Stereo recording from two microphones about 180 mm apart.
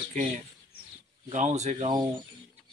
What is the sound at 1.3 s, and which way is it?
Speech, 40° right (ahead or behind).